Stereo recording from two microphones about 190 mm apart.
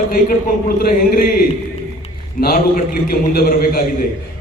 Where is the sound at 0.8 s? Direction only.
50° left (ahead or behind).